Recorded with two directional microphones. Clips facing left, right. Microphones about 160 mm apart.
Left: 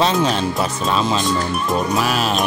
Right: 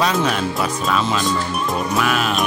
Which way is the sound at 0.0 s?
30° left (ahead or behind).